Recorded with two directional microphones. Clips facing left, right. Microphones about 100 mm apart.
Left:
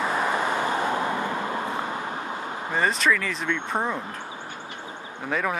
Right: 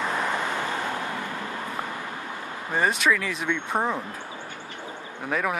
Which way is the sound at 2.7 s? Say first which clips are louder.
Even; 5° right (ahead or behind).